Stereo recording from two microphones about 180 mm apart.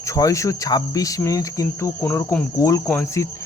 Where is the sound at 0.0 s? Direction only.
15° left (ahead or behind).